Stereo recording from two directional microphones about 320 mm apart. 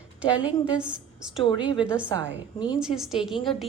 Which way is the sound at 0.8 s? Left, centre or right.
Centre.